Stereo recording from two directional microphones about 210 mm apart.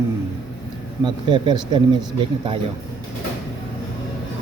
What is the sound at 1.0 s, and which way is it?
Speech, 20° right (ahead or behind).